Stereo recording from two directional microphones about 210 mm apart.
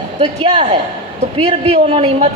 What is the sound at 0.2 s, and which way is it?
A man's voice, 30° right (ahead or behind).